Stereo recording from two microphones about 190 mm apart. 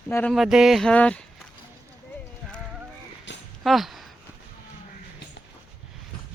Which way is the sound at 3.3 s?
70° left (ahead or behind).